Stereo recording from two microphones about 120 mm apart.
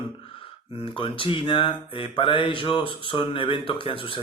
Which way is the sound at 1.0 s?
45° left (ahead or behind).